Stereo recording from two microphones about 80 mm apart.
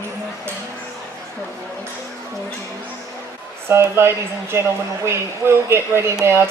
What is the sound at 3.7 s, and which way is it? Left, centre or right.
Speech, right.